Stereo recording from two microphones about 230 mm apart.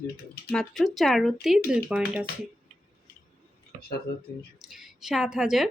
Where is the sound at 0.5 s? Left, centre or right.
Centre.